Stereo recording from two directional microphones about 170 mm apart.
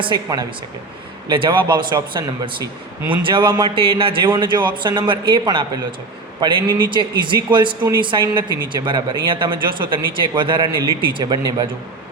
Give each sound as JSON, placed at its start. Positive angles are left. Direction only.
{"t": 0.0, "sound": "speech", "side_deg": -25}